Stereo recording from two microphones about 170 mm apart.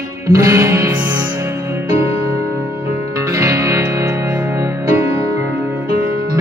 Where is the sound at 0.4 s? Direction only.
15° right (ahead or behind).